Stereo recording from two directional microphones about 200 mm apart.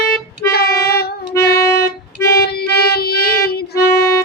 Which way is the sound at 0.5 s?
50° left (ahead or behind).